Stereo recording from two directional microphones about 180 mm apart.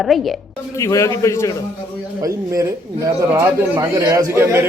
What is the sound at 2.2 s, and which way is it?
Speech, 20° right (ahead or behind).